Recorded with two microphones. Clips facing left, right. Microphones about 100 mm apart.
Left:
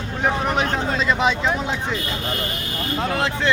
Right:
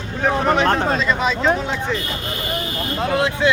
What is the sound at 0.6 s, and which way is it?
Speech, 60° right (ahead or behind).